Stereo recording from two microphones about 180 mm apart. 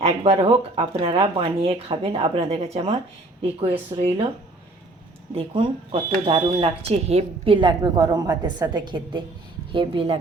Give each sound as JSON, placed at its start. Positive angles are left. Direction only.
{"t": 0.0, "sound": "speech", "side_deg": -35}
{"t": 5.3, "sound": "speech", "side_deg": -30}